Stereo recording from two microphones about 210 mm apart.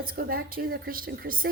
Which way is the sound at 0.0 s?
45° right (ahead or behind).